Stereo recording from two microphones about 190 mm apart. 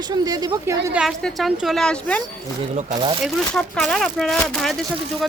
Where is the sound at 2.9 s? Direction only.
25° right (ahead or behind).